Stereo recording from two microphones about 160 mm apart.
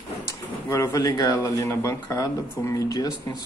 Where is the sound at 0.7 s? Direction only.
20° left (ahead or behind).